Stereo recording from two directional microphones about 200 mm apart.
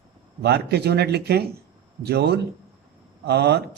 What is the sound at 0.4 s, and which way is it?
A man's voice, 55° right (ahead or behind).